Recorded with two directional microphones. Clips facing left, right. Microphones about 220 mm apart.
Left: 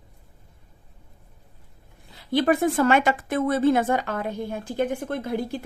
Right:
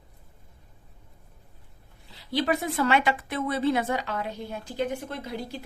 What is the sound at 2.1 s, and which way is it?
A woman's voice, 50° left (ahead or behind).